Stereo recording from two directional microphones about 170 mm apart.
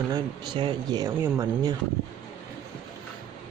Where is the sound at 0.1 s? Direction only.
25° right (ahead or behind).